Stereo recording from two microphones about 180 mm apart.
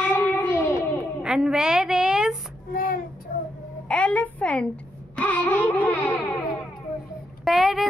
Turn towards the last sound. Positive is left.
turn(degrees=0)  # may be behind; listen again after turning